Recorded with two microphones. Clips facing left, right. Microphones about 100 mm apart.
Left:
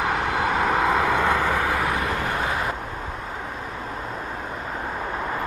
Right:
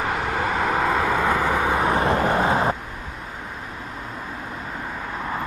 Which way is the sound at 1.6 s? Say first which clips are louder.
Right 3 dB; 20° right (ahead or behind).